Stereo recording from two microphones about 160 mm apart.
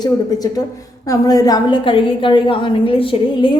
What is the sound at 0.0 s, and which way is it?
A woman's voice, 25° left (ahead or behind).